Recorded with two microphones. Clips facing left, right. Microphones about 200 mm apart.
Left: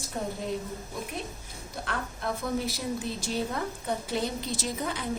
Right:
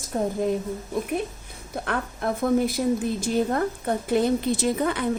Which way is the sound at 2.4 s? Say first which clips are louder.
Right 12 dB; 55° right (ahead or behind).